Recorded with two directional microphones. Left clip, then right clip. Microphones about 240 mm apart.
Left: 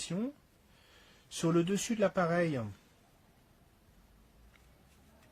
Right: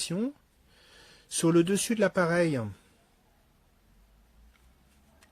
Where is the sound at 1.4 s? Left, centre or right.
Right.